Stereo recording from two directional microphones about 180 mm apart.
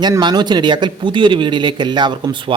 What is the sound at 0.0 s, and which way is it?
Speech, 25° right (ahead or behind).